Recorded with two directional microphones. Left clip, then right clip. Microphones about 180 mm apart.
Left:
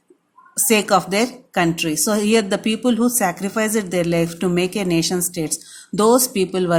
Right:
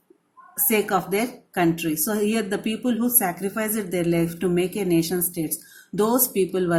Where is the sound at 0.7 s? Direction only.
30° left (ahead or behind).